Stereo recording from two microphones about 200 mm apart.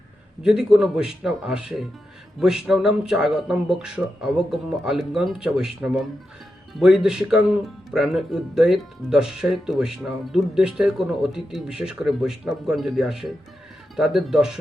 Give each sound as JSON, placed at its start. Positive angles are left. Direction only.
{"t": 0.4, "sound": "speech", "side_deg": 0}